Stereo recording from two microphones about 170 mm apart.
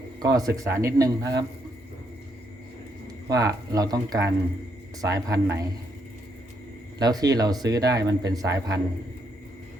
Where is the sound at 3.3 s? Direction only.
20° right (ahead or behind).